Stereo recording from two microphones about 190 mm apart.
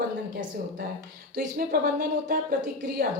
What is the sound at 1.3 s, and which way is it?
A woman's voice, 55° right (ahead or behind).